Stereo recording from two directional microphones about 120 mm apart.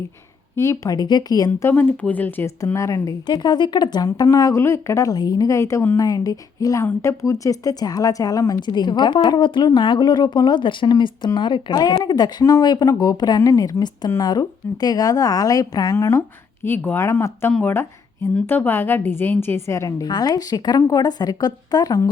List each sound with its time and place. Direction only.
0.5 s speech: 25° left (ahead or behind)
1.5 s speech: 20° left (ahead or behind)
2.7 s a woman's voice: 25° left (ahead or behind)
8.6 s a woman's voice: 40° left (ahead or behind)